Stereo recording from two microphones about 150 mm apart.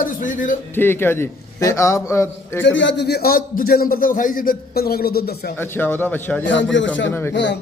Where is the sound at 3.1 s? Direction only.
80° left.